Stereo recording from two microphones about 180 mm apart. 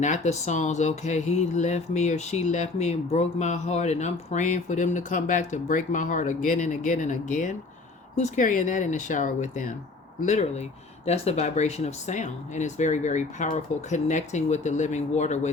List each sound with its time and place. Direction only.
0.0 s speech: 40° left (ahead or behind)